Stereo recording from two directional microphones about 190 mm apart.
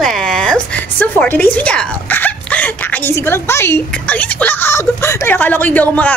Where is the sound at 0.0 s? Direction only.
5° left (ahead or behind).